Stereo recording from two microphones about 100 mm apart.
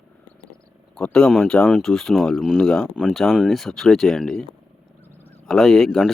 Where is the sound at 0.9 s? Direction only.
10° left (ahead or behind).